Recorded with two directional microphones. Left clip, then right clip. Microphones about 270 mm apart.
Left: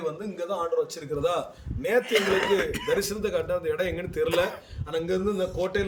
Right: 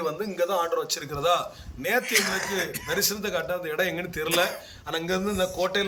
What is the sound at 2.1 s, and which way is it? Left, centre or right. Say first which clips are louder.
Speech: left 2 dB; left.